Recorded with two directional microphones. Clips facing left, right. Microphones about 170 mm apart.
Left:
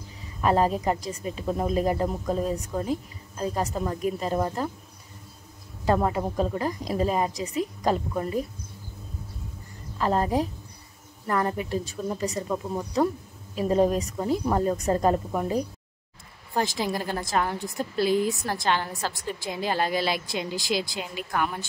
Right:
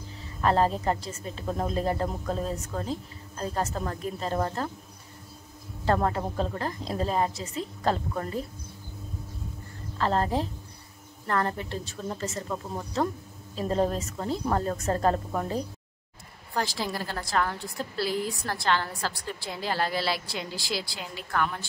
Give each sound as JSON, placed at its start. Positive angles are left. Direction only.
{"t": 0.4, "sound": "a woman's voice", "side_deg": 10}
{"t": 5.9, "sound": "a woman's voice", "side_deg": 10}
{"t": 9.9, "sound": "a woman's voice", "side_deg": 10}